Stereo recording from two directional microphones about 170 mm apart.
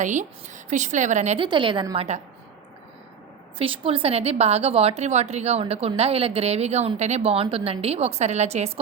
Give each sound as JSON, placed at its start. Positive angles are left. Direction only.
{"t": 0.0, "sound": "a woman's voice", "side_deg": -45}
{"t": 1.5, "sound": "a woman's voice", "side_deg": -30}
{"t": 2.0, "sound": "a woman's voice", "side_deg": -40}
{"t": 3.6, "sound": "a woman's voice", "side_deg": -30}